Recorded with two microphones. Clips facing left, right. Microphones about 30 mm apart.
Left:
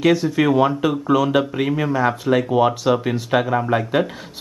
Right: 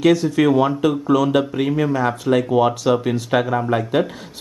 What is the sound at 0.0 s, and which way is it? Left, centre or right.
Speech, centre.